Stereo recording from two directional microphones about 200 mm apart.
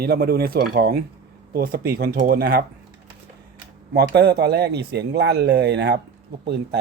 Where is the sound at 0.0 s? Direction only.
50° right (ahead or behind).